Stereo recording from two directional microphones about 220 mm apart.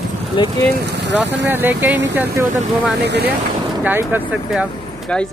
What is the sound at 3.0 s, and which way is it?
Speech, 50° right (ahead or behind).